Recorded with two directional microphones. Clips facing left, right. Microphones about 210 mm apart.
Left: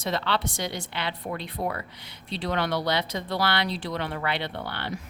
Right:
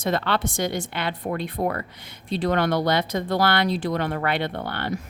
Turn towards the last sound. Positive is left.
turn(degrees=-50)  # may be behind; listen again after turning